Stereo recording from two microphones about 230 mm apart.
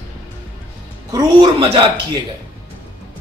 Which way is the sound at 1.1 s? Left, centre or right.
Centre.